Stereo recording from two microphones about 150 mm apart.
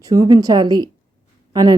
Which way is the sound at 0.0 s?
25° right (ahead or behind).